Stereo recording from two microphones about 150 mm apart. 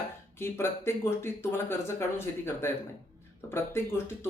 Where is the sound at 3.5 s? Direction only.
15° left (ahead or behind).